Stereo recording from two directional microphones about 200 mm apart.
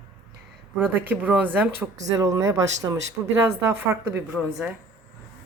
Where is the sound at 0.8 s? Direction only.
10° right (ahead or behind).